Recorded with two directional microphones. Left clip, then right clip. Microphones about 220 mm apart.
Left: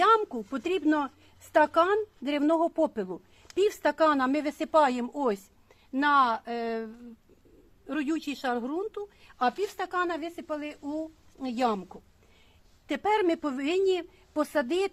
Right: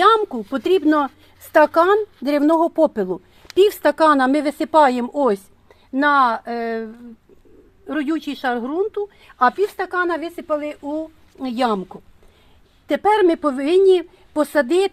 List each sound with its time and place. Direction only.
0.3 s a woman's voice: 45° right (ahead or behind)
1.8 s a woman's voice: 30° right (ahead or behind)
2.9 s a woman's voice: 45° right (ahead or behind)
7.9 s a woman's voice: 35° right (ahead or behind)
9.6 s a woman's voice: 55° right (ahead or behind)